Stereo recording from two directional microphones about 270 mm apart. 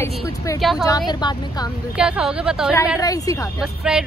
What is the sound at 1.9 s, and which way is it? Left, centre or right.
Speech, centre.